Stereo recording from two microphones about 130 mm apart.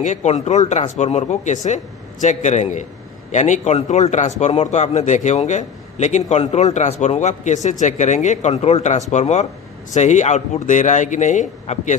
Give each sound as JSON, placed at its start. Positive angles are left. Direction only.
{"t": 0.0, "sound": "a man's voice", "side_deg": 65}